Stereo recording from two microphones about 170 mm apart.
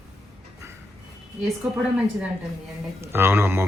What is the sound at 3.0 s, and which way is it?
Speech, 15° right (ahead or behind).